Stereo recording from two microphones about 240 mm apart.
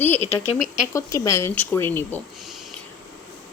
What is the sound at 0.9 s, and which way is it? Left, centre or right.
A woman's voice, centre.